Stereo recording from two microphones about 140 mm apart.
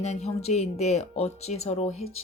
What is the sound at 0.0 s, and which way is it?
Speech, 50° left (ahead or behind).